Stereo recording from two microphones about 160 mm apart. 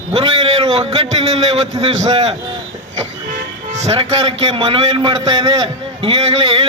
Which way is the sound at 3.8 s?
40° right (ahead or behind).